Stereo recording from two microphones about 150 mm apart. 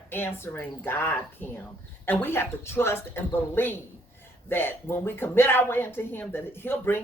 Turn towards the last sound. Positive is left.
turn(degrees=15)  # may be behind; listen again after turning